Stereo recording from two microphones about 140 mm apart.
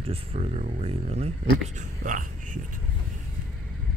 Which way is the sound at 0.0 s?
40° right (ahead or behind).